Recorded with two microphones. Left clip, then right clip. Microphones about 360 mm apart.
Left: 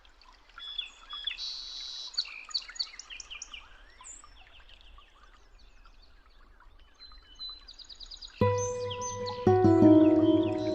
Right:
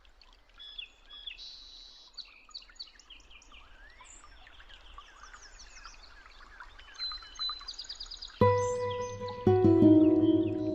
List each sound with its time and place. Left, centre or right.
0.6 s bird vocalization: centre; by 3.1 s left
6.6 s a sound: right
7.3 s music: centre